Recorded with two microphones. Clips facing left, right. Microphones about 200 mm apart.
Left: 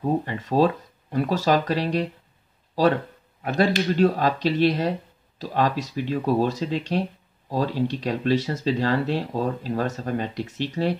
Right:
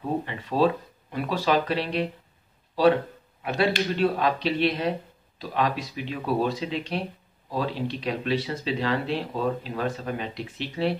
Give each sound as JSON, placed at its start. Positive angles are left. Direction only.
{"t": 0.2, "sound": "speech", "side_deg": 40}